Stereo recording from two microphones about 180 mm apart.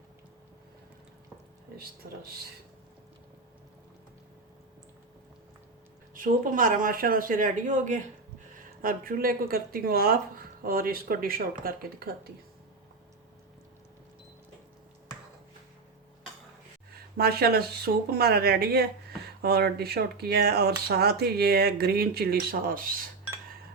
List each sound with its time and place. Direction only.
6.1 s speech: 50° right (ahead or behind)
17.2 s speech: 60° right (ahead or behind)